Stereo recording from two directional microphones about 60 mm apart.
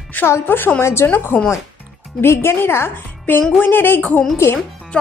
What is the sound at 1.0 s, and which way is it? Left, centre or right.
Speech, left.